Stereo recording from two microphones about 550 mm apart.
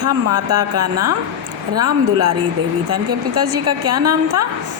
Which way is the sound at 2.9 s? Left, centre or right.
Right.